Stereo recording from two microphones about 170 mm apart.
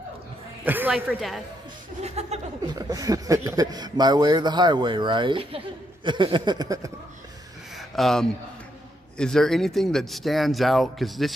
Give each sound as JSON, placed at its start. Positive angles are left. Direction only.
{"t": 0.7, "sound": "a woman's voice", "side_deg": -10}
{"t": 2.0, "sound": "chuckle", "side_deg": -40}
{"t": 2.7, "sound": "a man's voice", "side_deg": -20}
{"t": 7.7, "sound": "a sound", "side_deg": 0}
{"t": 9.2, "sound": "speech", "side_deg": 0}